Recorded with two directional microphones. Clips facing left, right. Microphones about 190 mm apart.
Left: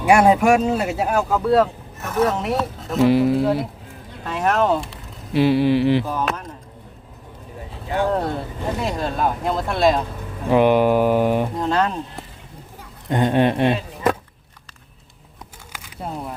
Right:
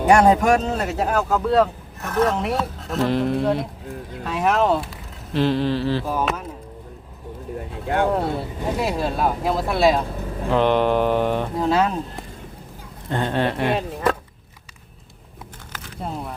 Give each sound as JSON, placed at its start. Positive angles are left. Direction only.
{"t": 0.1, "sound": "speech", "side_deg": 10}
{"t": 5.3, "sound": "speech", "side_deg": 10}
{"t": 6.2, "sound": "chop", "side_deg": -5}
{"t": 8.1, "sound": "speech", "side_deg": -5}
{"t": 10.5, "sound": "speech", "side_deg": 10}
{"t": 11.5, "sound": "speech", "side_deg": -5}
{"t": 13.1, "sound": "speech", "side_deg": 15}
{"t": 15.7, "sound": "crumpling", "side_deg": 5}